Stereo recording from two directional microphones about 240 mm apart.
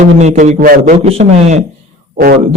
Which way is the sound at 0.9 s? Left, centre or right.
Right.